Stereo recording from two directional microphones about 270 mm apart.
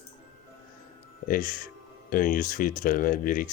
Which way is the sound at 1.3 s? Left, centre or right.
Left.